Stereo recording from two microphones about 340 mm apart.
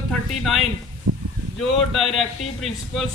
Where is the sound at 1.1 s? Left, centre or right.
Right.